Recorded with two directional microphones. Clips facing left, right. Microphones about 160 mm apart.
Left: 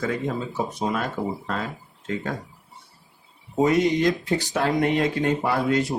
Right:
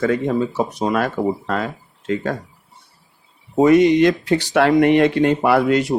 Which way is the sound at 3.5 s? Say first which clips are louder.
Right 8 dB; 75° right (ahead or behind).